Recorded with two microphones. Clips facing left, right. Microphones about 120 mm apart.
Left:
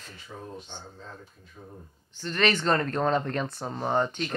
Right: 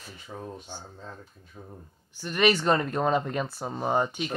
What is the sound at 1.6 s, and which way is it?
Speech, 35° right (ahead or behind).